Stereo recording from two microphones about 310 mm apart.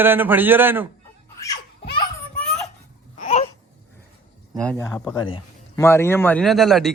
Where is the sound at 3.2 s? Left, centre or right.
Left.